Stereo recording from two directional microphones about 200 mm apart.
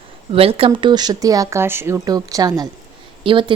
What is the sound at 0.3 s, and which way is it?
A woman's voice, 30° right (ahead or behind).